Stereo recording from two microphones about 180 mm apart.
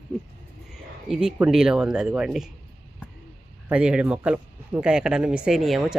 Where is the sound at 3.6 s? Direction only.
5° right (ahead or behind).